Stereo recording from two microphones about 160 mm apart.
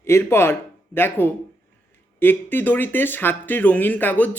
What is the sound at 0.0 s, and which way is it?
Speech, 15° left (ahead or behind).